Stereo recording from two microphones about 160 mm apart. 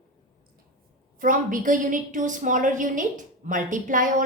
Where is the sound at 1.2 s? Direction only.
55° right (ahead or behind).